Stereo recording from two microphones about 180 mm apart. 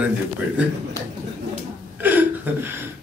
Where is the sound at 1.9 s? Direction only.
10° right (ahead or behind).